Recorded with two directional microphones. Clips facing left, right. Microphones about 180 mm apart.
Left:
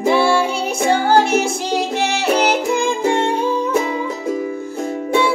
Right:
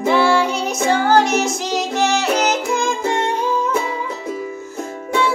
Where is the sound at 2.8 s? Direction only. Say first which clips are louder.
Left 3 dB; 10° left (ahead or behind).